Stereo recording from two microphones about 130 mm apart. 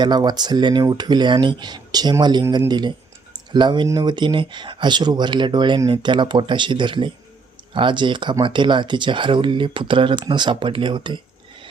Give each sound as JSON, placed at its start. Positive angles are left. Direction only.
{"t": 0.0, "sound": "speech", "side_deg": -35}